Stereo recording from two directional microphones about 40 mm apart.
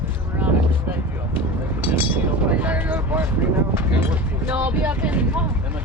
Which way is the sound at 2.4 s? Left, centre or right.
Right.